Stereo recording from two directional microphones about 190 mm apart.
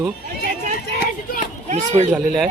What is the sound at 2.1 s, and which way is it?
Speech, centre (ahead or behind).